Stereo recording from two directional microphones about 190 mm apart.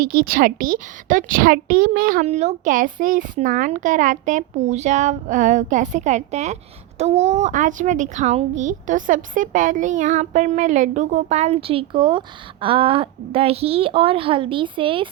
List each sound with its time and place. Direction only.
0.0 s a woman's voice: 50° right (ahead or behind)
2.2 s a child's voice: 35° right (ahead or behind)